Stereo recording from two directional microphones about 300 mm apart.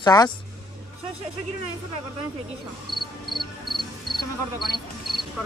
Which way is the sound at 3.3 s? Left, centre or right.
Centre.